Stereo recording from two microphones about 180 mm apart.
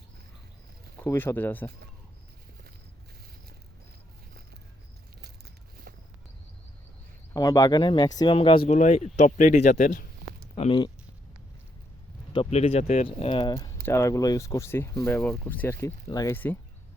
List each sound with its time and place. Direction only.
1.0 s speech: 10° left (ahead or behind)
7.3 s speech: 20° left (ahead or behind); by 10.1 s 45° left (ahead or behind)
10.5 s speech: 30° left (ahead or behind)
12.3 s speech: 35° left (ahead or behind)
13.5 s speech: 20° left (ahead or behind)